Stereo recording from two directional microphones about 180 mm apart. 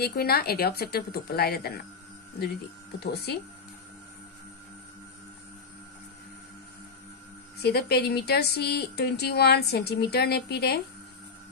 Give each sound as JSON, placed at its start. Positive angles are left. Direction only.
{"t": 0.0, "sound": "speech", "side_deg": 60}
{"t": 3.0, "sound": "speech", "side_deg": 65}
{"t": 7.6, "sound": "speech", "side_deg": 65}